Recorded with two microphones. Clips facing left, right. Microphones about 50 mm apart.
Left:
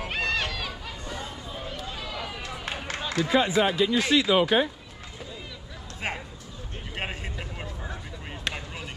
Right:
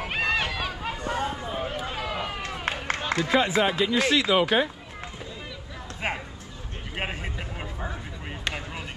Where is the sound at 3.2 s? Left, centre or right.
Right.